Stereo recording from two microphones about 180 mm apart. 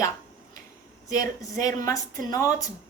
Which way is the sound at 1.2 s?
20° left (ahead or behind).